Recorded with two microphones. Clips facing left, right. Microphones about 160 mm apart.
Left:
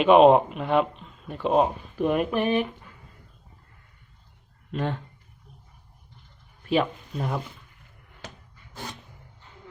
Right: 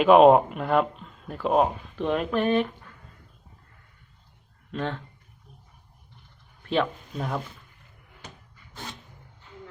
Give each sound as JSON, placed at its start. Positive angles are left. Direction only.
{"t": 0.0, "sound": "speech", "side_deg": 0}
{"t": 4.7, "sound": "speech", "side_deg": 10}
{"t": 6.7, "sound": "speech", "side_deg": 5}